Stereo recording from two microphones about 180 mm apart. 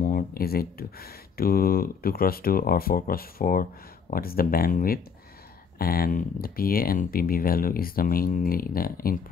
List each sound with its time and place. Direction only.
0.0 s speech: 55° left (ahead or behind)